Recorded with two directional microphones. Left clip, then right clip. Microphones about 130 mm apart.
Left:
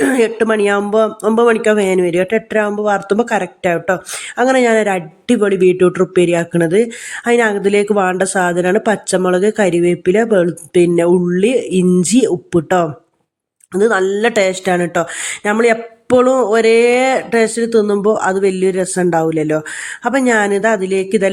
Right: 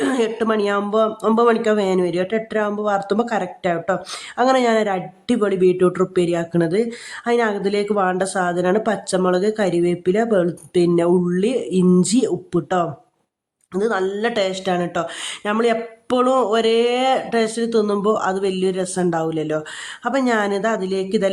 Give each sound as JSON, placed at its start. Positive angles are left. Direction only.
{"t": 0.0, "sound": "a woman's voice", "side_deg": 20}